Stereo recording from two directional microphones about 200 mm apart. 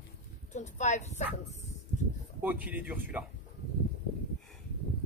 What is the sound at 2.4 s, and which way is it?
Speech, 10° right (ahead or behind).